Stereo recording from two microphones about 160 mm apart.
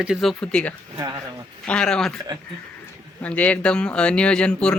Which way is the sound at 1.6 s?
5° left (ahead or behind).